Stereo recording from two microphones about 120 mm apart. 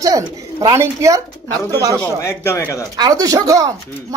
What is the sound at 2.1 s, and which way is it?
Speech, 20° left (ahead or behind).